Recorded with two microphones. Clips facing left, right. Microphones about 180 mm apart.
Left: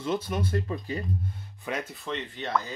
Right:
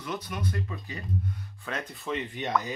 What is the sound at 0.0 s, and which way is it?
Speech, 25° left (ahead or behind).